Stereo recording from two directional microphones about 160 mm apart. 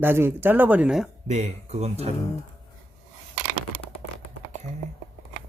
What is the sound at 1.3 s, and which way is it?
Speech, 45° right (ahead or behind).